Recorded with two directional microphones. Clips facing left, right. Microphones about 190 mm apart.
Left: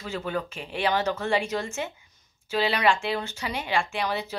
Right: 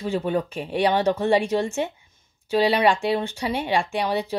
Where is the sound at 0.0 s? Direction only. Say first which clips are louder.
Right 7 dB; 30° right (ahead or behind).